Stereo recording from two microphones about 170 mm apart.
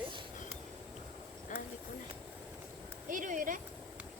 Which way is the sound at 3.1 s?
50° right (ahead or behind).